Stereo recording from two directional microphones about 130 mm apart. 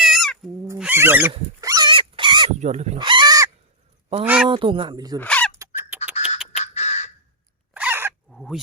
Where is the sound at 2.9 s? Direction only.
40° right (ahead or behind).